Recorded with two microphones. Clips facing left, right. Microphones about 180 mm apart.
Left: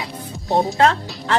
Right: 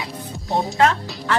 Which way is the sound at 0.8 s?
30° left (ahead or behind).